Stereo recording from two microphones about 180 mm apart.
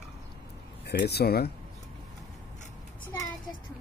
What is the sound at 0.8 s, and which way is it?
Speech, 65° left (ahead or behind).